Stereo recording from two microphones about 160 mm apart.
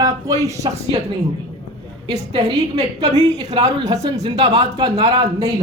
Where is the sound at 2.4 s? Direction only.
25° right (ahead or behind).